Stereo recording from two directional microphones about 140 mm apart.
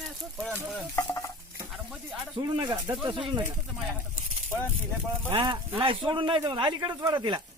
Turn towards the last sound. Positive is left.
turn(degrees=-30)  # may be behind; listen again after turning